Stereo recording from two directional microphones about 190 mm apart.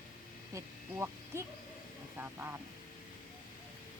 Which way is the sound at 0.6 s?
15° right (ahead or behind).